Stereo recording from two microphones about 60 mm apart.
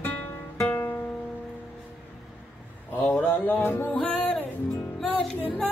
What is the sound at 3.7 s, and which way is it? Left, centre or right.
Music, left.